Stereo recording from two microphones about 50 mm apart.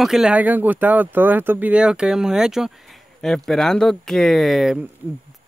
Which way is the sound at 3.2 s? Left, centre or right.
Centre.